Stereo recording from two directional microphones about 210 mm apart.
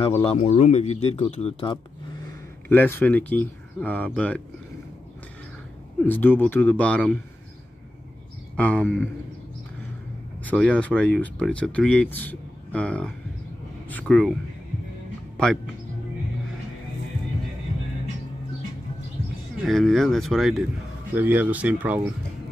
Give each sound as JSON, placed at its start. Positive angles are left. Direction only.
{"t": 0.1, "sound": "speech", "side_deg": 25}
{"t": 2.7, "sound": "speech", "side_deg": 10}
{"t": 6.0, "sound": "speech", "side_deg": 10}
{"t": 8.5, "sound": "speech", "side_deg": 5}
{"t": 10.4, "sound": "speech", "side_deg": 5}
{"t": 15.3, "sound": "a man's voice", "side_deg": 5}
{"t": 19.6, "sound": "speech", "side_deg": 0}